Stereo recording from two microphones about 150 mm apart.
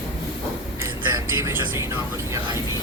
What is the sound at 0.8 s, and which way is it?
Vehicle, 15° right (ahead or behind).